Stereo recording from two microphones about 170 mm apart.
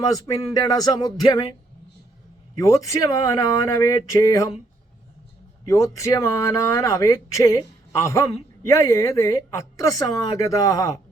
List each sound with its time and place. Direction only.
0.5 s speech: 25° left (ahead or behind)
2.6 s speech: 20° left (ahead or behind)
5.6 s speech: 20° left (ahead or behind)